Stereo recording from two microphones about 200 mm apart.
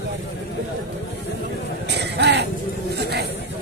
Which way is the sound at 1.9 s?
55° right (ahead or behind).